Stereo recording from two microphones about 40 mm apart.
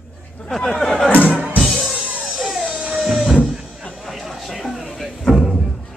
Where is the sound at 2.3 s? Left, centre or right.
Centre.